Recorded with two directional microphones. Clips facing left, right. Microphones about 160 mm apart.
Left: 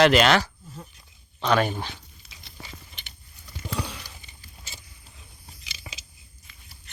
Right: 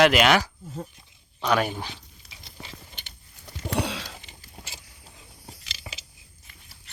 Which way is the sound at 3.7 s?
80° right.